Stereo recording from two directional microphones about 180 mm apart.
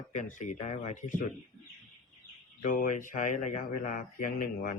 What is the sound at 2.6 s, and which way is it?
Speech, 45° left (ahead or behind).